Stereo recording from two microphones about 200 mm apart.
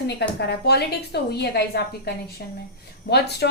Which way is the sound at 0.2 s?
55° left (ahead or behind).